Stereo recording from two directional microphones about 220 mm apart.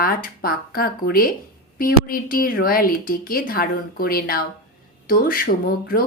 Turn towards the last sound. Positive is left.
turn(degrees=40)  # may be behind; listen again after turning